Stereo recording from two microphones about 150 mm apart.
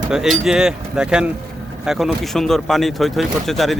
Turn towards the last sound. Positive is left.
turn(degrees=0)  # may be behind; listen again after turning